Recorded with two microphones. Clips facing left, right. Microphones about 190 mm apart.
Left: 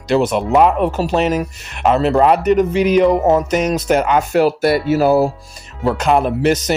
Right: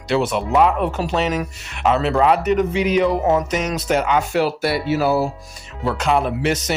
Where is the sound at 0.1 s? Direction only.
40° left (ahead or behind).